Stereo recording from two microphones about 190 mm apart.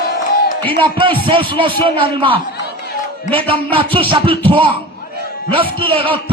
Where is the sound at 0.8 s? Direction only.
25° right (ahead or behind).